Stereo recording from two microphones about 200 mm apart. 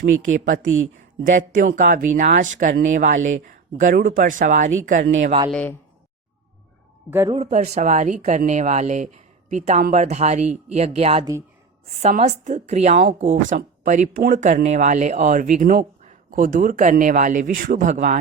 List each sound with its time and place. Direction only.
0.3 s speech: 40° right (ahead or behind)
5.5 s speech: 5° left (ahead or behind)
7.1 s a man's voice: 10° right (ahead or behind)
7.3 s speech: 35° right (ahead or behind)